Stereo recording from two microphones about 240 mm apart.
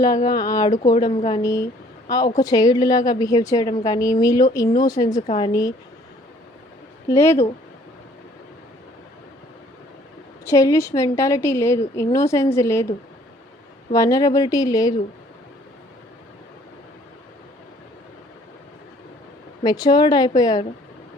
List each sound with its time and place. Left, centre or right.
0.3 s a woman's voice: centre
7.1 s a woman's voice: centre
10.4 s a woman's voice: centre
13.9 s a woman's voice: centre
19.6 s a woman's voice: centre